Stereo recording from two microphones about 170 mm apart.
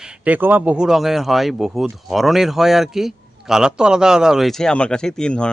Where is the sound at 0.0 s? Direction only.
5° right (ahead or behind).